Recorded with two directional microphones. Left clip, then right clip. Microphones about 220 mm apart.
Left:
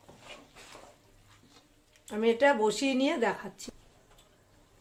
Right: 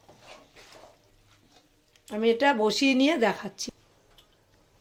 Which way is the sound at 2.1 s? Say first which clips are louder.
Right 2 dB; 20° right (ahead or behind).